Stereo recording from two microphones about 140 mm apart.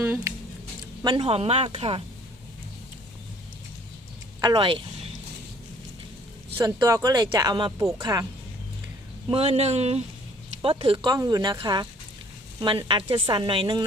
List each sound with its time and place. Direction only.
0.0 s a sound: 15° right (ahead or behind)
1.0 s speech: 35° right (ahead or behind)
4.4 s speech: 35° right (ahead or behind)
7.0 s speech: 25° right (ahead or behind)
9.3 s a man's voice: 45° right (ahead or behind)